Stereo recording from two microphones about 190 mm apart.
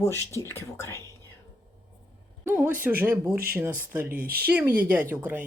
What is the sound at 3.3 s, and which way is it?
Speech, 50° right (ahead or behind).